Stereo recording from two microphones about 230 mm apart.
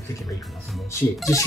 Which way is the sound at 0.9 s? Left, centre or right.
Centre.